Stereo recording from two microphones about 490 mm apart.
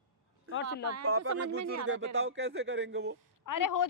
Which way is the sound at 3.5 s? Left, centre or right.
Left.